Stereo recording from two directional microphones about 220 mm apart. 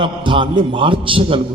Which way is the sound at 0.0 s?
20° right (ahead or behind).